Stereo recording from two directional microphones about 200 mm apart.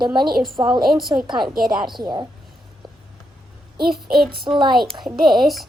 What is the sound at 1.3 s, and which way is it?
Speech, centre (ahead or behind).